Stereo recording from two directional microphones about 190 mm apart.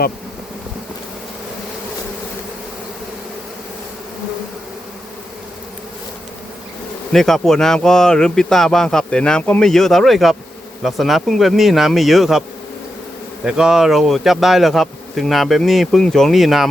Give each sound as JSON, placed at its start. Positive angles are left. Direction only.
{"t": 7.1, "sound": "speech", "side_deg": 0}
{"t": 13.4, "sound": "speech", "side_deg": -5}